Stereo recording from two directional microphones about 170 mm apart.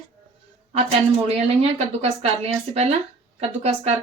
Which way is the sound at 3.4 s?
35° right (ahead or behind).